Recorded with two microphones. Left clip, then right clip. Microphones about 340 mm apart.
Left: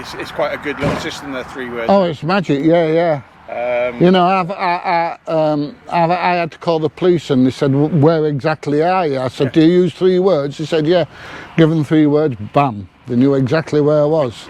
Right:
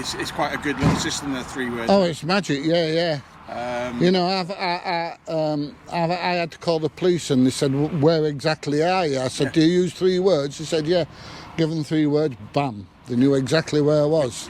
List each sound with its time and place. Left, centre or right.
0.0 s speech: right
1.9 s speech: centre
3.6 s speech: right
4.0 s speech: left